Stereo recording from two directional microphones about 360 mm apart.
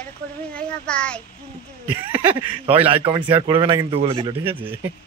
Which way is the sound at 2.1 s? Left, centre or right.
Centre.